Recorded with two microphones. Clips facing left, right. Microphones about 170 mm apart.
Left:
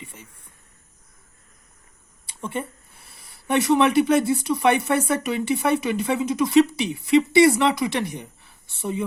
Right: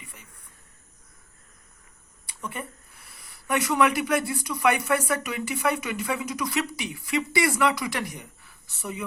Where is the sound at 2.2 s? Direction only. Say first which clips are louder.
Left 6 dB; 25° left (ahead or behind).